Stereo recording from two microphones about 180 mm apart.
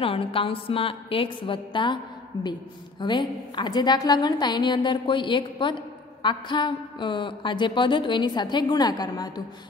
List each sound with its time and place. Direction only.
0.0 s a woman's voice: 30° left (ahead or behind)